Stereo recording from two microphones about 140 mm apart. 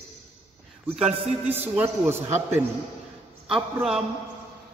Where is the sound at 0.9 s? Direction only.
10° right (ahead or behind).